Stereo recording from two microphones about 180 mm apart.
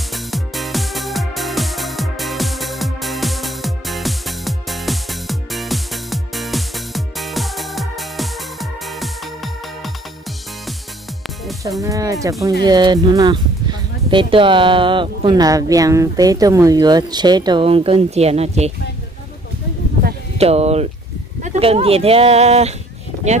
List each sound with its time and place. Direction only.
0.1 s music: centre (ahead or behind)
11.8 s speech: 20° right (ahead or behind); by 18.7 s 35° right (ahead or behind)
20.3 s speech: 35° right (ahead or behind)